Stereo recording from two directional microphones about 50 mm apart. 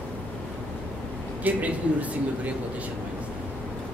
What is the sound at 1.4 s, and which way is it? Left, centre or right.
Speech, right.